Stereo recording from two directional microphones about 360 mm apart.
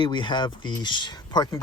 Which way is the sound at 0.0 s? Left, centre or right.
Centre.